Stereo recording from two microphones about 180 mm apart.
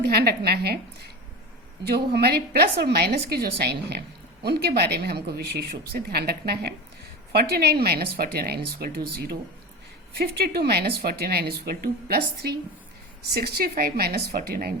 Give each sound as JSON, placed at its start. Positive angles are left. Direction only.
{"t": 0.1, "sound": "speech", "side_deg": -60}
{"t": 13.3, "sound": "speech", "side_deg": -60}